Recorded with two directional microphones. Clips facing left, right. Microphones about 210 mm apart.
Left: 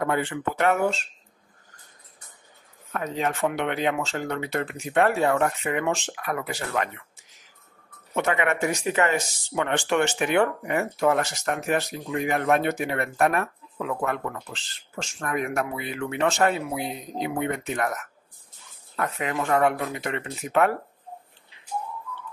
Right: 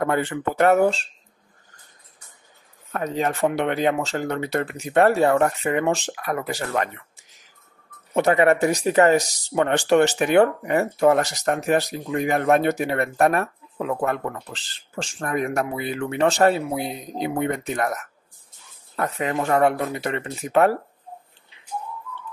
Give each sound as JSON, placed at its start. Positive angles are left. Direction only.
{"t": 0.0, "sound": "speech", "side_deg": -40}
{"t": 2.9, "sound": "speech", "side_deg": -40}
{"t": 8.1, "sound": "speech", "side_deg": -35}